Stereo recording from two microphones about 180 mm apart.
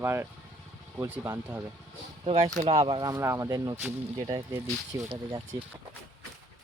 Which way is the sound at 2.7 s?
30° right (ahead or behind).